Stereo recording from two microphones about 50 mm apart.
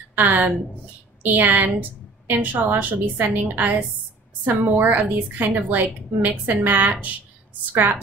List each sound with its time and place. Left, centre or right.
0.1 s a woman's voice: right